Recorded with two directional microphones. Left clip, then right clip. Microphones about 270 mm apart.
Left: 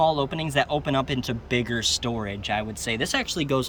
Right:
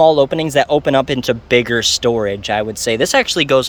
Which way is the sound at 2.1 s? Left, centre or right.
Centre.